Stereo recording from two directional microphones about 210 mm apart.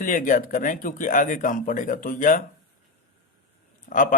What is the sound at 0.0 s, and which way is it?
Speech, 40° left (ahead or behind).